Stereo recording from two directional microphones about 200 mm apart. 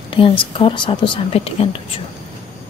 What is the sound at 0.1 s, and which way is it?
A woman's voice, 25° left (ahead or behind).